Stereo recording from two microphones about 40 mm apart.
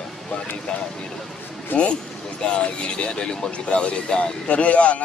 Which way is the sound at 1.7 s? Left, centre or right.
Left.